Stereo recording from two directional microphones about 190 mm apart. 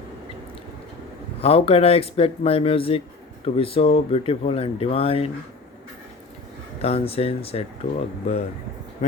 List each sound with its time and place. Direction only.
1.4 s speech: 30° left (ahead or behind)
6.8 s speech: 30° left (ahead or behind)